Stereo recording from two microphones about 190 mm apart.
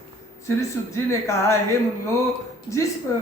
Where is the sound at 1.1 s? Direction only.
15° left (ahead or behind).